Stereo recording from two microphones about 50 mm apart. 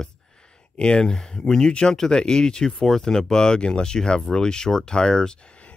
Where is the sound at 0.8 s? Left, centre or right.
Centre.